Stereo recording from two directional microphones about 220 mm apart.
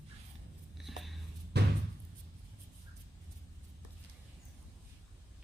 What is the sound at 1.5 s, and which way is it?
Slam, 50° right (ahead or behind).